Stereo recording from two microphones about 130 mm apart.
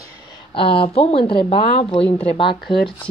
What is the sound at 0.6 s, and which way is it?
Speech, 45° left (ahead or behind).